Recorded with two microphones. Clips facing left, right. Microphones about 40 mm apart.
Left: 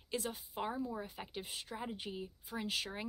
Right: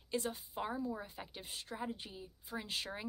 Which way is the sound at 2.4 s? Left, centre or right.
Centre.